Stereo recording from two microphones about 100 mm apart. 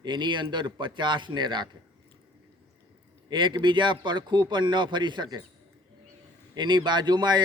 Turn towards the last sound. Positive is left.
turn(degrees=-45)  # may be behind; listen again after turning